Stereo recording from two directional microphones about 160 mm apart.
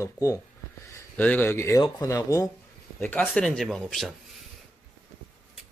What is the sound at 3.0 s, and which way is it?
A man's voice, 10° left (ahead or behind).